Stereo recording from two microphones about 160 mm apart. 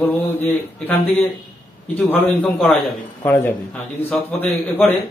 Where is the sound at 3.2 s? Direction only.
20° left (ahead or behind).